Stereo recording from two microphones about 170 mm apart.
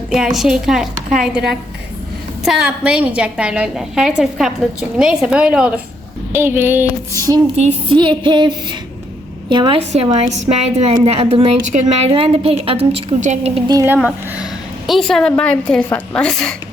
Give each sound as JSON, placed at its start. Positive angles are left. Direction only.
{"t": 0.1, "sound": "a woman's voice", "side_deg": 0}
{"t": 7.5, "sound": "a woman's voice", "side_deg": -35}
{"t": 9.9, "sound": "a woman's voice", "side_deg": -40}
{"t": 13.8, "sound": "speech", "side_deg": -10}
{"t": 14.8, "sound": "a woman's voice", "side_deg": 0}